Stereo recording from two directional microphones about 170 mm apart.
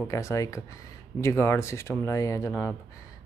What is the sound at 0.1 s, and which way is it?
Speech, 20° left (ahead or behind).